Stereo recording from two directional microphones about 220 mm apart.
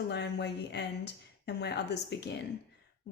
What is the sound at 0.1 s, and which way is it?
A woman's voice, 50° left (ahead or behind).